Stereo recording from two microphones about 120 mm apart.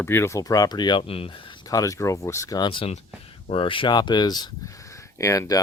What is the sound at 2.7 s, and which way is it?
Speech, 50° left (ahead or behind).